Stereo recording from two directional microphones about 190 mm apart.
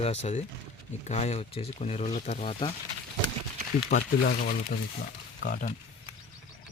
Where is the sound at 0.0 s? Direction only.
35° left (ahead or behind).